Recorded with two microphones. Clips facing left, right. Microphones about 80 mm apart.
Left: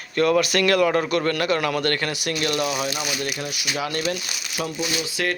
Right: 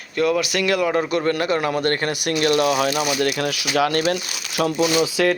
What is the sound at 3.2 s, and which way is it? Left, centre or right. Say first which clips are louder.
Speech: right 7 dB; right.